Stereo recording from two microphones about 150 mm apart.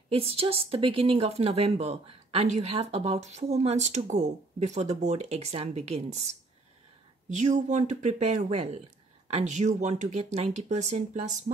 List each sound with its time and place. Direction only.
0.1 s speech: 40° right (ahead or behind)